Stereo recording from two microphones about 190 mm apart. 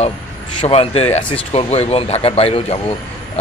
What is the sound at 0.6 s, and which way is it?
Speech, 30° left (ahead or behind).